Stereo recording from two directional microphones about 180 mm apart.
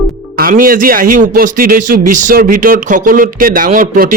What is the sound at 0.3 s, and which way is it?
A man's voice, 50° right (ahead or behind).